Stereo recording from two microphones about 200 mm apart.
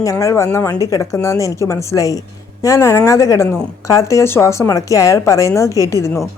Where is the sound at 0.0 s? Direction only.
15° left (ahead or behind).